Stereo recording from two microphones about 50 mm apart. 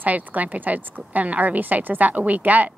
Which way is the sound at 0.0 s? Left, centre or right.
Right.